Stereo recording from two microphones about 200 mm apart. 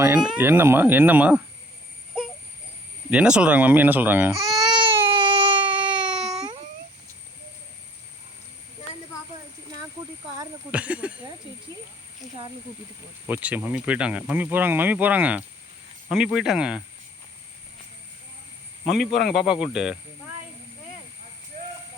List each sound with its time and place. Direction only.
0.0 s speech: 5° right (ahead or behind)
3.1 s baby cry: 5° right (ahead or behind); by 6.3 s 20° right (ahead or behind)
10.7 s a sound: 5° right (ahead or behind)
13.2 s speech: 10° right (ahead or behind)
18.9 s speech: centre (ahead or behind)